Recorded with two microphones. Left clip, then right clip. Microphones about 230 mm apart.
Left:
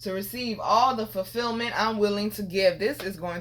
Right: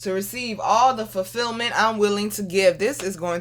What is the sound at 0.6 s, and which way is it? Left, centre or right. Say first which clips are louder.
Speech: right 4 dB; right.